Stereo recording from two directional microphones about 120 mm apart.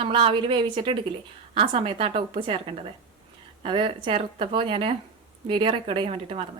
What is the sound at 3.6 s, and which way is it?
A woman's voice, 45° right (ahead or behind).